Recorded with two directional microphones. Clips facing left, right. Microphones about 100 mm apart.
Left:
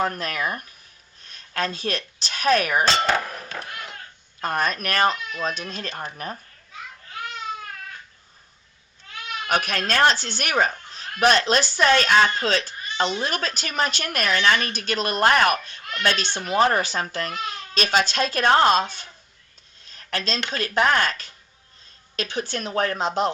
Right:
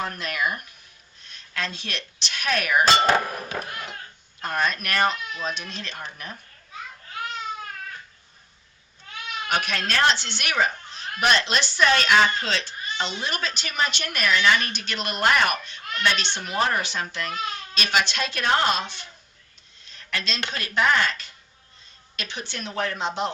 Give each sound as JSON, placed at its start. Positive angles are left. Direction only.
{"t": 0.0, "sound": "speech", "side_deg": 40}
{"t": 2.8, "sound": "clang", "side_deg": -10}
{"t": 4.4, "sound": "speech", "side_deg": 40}
{"t": 9.5, "sound": "speech", "side_deg": 45}
{"t": 20.1, "sound": "speech", "side_deg": 40}